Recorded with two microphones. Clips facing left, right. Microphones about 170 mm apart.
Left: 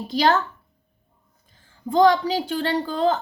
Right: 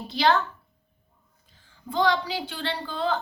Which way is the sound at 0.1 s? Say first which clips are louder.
Left 3 dB; 45° left (ahead or behind).